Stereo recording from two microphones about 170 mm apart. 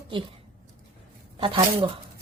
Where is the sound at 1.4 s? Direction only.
30° right (ahead or behind).